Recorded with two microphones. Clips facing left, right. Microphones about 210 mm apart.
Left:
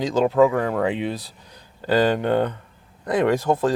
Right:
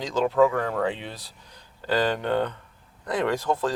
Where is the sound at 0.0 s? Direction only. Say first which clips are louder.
Left 4 dB; 15° left (ahead or behind).